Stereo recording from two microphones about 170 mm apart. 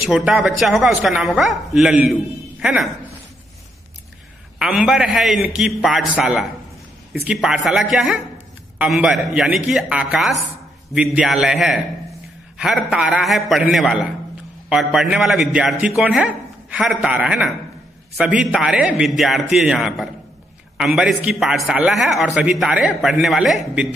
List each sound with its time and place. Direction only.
0.0 s a man's voice: 5° right (ahead or behind)
4.6 s a man's voice: 5° right (ahead or behind)